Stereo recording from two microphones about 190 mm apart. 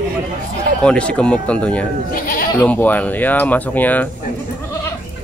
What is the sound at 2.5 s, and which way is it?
Speech, 10° left (ahead or behind).